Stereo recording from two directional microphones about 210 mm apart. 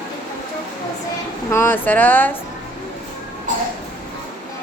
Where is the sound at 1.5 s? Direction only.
10° left (ahead or behind).